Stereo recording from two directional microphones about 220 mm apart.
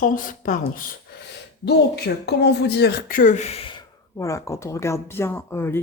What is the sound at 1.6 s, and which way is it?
Speech, 50° left (ahead or behind).